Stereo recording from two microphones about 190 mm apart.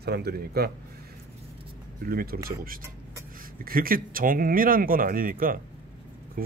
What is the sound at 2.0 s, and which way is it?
Speech, 50° right (ahead or behind).